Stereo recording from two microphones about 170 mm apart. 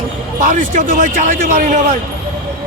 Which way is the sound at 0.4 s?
50° right (ahead or behind).